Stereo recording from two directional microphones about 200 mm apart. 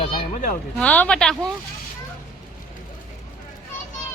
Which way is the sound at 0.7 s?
5° left (ahead or behind).